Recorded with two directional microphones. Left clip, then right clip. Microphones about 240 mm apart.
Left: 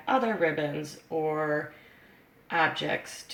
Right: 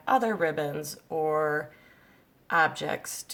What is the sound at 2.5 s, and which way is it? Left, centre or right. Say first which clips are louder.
Speech: right 1 dB; right.